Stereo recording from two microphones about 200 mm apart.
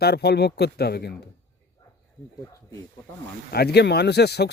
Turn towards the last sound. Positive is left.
turn(degrees=55)  # may be behind; listen again after turning